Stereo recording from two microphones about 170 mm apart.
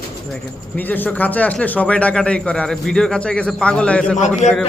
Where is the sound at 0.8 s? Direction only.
10° left (ahead or behind).